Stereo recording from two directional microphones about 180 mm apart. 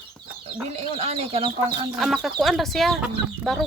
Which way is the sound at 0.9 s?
35° right (ahead or behind).